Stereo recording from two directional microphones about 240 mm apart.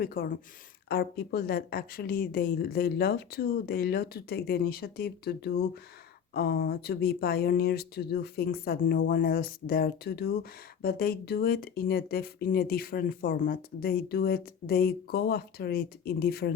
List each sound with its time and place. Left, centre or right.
0.0 s speech: left